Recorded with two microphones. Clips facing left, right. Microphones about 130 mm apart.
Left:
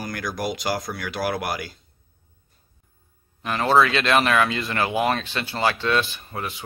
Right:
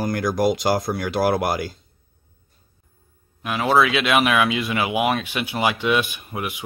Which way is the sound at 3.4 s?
5° right (ahead or behind).